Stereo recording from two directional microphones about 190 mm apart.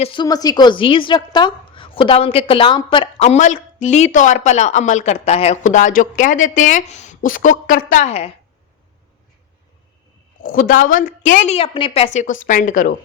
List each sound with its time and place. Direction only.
0.0 s a woman's voice: 25° left (ahead or behind)
10.4 s a woman's voice: 45° left (ahead or behind)